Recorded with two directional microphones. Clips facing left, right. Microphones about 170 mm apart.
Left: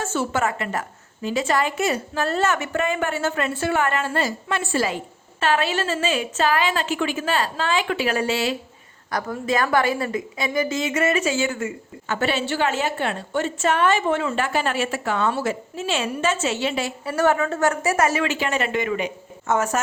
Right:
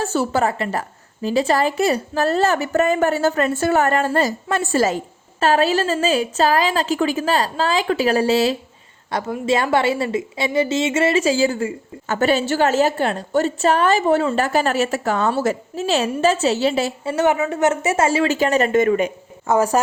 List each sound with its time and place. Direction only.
0.0 s a woman's voice: 35° right (ahead or behind)
9.0 s a woman's voice: 25° right (ahead or behind); by 19.1 s 45° right (ahead or behind)
19.5 s a woman's voice: 35° right (ahead or behind)